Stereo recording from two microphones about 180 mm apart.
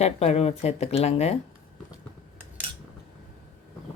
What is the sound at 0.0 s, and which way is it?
Speech, 35° left (ahead or behind).